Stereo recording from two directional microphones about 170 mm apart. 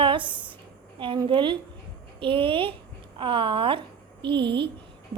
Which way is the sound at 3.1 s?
30° right (ahead or behind).